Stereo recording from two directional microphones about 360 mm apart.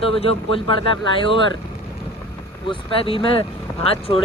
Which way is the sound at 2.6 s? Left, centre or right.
Centre.